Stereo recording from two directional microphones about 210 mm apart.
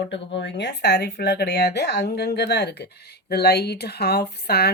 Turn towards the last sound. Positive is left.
turn(degrees=50)  # may be behind; listen again after turning